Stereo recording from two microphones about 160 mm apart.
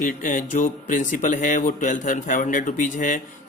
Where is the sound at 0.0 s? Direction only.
55° left (ahead or behind).